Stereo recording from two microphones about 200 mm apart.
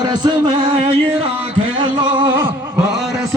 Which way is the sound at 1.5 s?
25° right (ahead or behind).